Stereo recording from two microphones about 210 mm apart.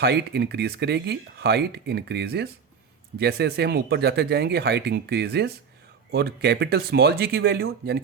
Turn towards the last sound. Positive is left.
turn(degrees=-50)  # may be behind; listen again after turning